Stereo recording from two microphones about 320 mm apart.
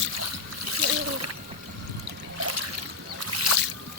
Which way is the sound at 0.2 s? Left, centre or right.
Right.